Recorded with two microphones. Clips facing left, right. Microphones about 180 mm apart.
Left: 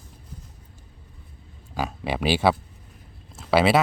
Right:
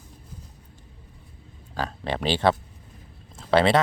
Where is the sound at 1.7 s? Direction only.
10° left (ahead or behind).